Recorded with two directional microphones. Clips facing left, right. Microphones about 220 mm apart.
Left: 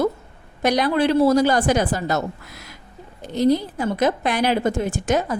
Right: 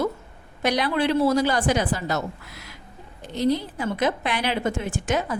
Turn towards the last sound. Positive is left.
turn(degrees=40)  # may be behind; listen again after turning